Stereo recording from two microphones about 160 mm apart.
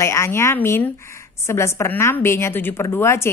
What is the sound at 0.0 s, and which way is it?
A woman's voice, 15° left (ahead or behind).